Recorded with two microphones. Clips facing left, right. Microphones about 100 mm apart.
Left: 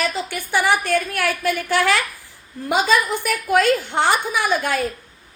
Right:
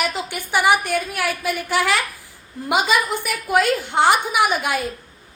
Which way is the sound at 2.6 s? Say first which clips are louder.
Left 1 dB; 15° right (ahead or behind).